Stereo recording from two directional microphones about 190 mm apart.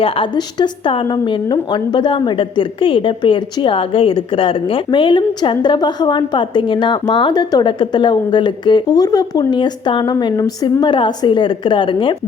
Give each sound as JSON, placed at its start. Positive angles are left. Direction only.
{"t": 0.0, "sound": "a woman's voice", "side_deg": 25}